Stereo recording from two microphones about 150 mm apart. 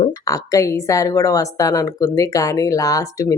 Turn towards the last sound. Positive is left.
turn(degrees=20)  # may be behind; listen again after turning